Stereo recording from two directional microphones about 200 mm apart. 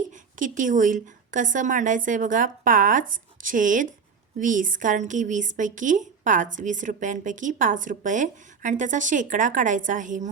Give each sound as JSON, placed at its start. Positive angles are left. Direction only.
{"t": 0.1, "sound": "a woman's voice", "side_deg": -40}